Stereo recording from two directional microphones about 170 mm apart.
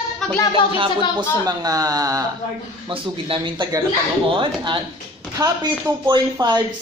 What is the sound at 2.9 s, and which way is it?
Speech, 30° right (ahead or behind).